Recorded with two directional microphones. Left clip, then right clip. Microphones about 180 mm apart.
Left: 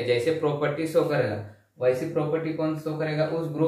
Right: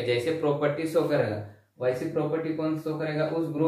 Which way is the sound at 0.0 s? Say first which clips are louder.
Left 2 dB; 15° right (ahead or behind).